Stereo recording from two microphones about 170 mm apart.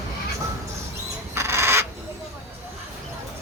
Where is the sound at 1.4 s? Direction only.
15° right (ahead or behind).